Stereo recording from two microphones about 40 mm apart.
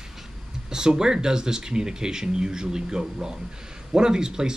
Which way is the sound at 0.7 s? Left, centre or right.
Centre.